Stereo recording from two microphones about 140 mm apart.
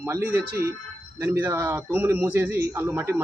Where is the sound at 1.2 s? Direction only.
15° right (ahead or behind).